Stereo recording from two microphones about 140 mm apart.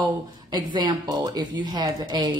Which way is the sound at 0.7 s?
30° right (ahead or behind).